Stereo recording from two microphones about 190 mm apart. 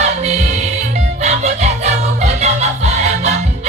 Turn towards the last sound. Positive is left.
turn(degrees=-35)  # may be behind; listen again after turning